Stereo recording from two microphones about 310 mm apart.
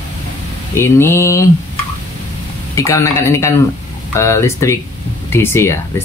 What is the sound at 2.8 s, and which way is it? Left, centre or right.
Speech, centre.